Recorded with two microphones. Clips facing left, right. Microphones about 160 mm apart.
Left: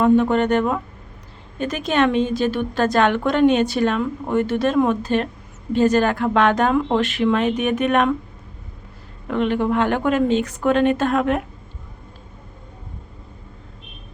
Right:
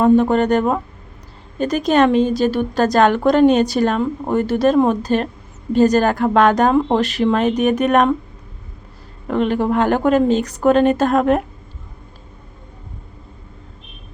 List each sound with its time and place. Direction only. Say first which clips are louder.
0.0 s a woman's voice: right 3 dB; 40° right (ahead or behind)
9.2 s a woman's voice: right 2 dB; 40° right (ahead or behind)